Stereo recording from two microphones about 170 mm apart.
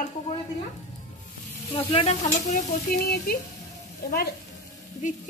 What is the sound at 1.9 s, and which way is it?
Stir, 40° left (ahead or behind).